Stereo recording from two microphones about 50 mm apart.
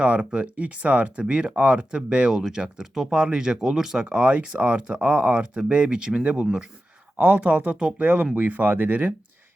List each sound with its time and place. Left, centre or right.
0.0 s speech: right
1.2 s speech: centre
4.1 s speech: right
7.2 s speech: right